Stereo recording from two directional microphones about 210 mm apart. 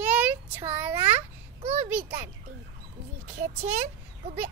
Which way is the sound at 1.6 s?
30° right (ahead or behind).